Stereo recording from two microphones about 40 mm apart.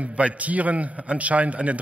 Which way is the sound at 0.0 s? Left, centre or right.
Right.